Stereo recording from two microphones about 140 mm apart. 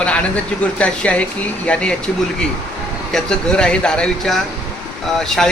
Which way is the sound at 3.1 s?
5° left (ahead or behind).